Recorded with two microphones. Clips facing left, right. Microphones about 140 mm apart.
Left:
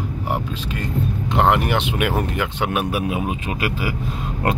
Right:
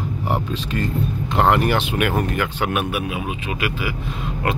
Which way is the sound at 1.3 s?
20° left (ahead or behind).